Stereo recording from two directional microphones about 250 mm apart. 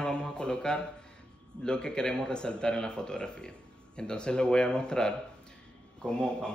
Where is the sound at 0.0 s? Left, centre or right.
Centre.